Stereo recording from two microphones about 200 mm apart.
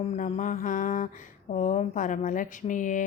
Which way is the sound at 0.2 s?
40° left (ahead or behind).